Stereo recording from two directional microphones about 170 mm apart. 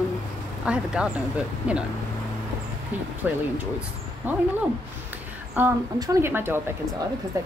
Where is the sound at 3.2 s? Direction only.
10° right (ahead or behind).